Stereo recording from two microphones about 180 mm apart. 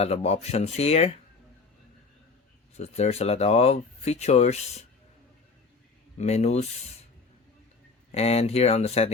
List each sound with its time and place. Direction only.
0.0 s speech: 35° left (ahead or behind)
2.7 s speech: 35° left (ahead or behind)
6.1 s speech: 40° left (ahead or behind)
8.1 s speech: 35° left (ahead or behind)